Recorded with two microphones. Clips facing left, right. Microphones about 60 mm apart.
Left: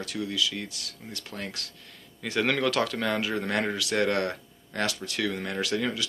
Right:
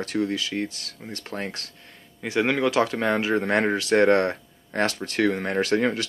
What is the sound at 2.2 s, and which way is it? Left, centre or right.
Speech, right.